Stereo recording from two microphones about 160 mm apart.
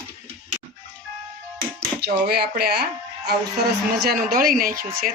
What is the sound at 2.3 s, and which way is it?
Speech, 80° right.